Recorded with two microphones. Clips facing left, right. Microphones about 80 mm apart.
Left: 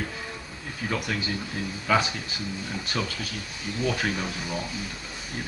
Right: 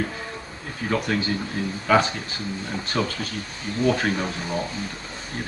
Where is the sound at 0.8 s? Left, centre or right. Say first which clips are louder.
Right 5 dB; right.